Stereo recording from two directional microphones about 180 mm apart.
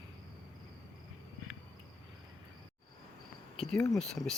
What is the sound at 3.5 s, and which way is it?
Speech, centre (ahead or behind).